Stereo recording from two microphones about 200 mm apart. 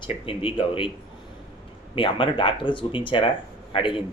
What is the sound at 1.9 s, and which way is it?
Speech, 25° left (ahead or behind).